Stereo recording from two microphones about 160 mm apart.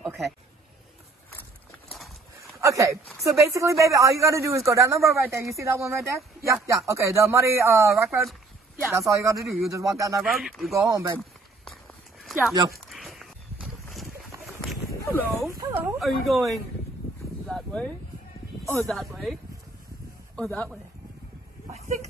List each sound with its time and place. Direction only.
2.6 s speech: 20° right (ahead or behind)
10.2 s speech: centre (ahead or behind)
10.7 s speech: 20° right (ahead or behind)
11.1 s walk: centre (ahead or behind)
12.9 s boat: centre (ahead or behind)
15.0 s speech: 15° left (ahead or behind)
15.6 s speech: 15° right (ahead or behind)
16.0 s speech: centre (ahead or behind)
17.5 s speech: centre (ahead or behind)
20.3 s speech: 5° left (ahead or behind)
21.7 s vehicle: 45° right (ahead or behind)